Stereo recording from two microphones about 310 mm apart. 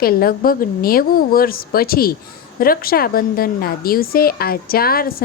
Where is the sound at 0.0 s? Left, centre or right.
Left.